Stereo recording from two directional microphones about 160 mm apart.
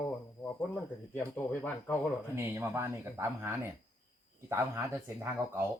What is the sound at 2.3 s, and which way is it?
Speech, 15° right (ahead or behind).